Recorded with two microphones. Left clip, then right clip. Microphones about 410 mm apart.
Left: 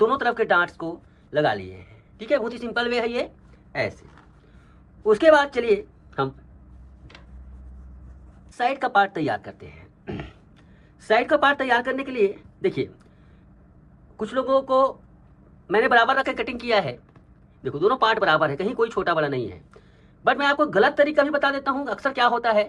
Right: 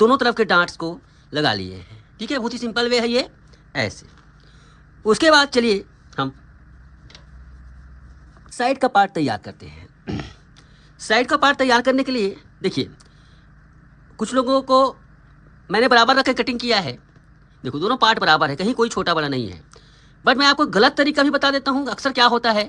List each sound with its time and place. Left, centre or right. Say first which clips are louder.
0.0 s speech: right 5 dB; right
5.0 s a woman's voice: right 2 dB; right
8.5 s speech: right 3 dB; right
14.2 s speech: right 3 dB; right